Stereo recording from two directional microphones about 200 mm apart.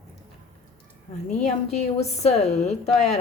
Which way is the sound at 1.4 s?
35° left (ahead or behind).